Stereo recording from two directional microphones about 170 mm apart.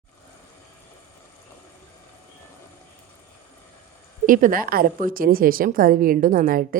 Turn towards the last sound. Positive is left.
turn(degrees=-55)  # may be behind; listen again after turning